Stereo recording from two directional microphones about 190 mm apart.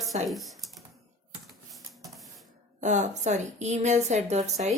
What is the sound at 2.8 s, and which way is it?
A woman's voice, 40° right (ahead or behind).